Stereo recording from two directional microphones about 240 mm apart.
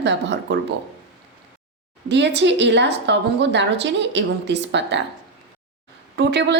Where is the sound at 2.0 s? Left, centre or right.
Right.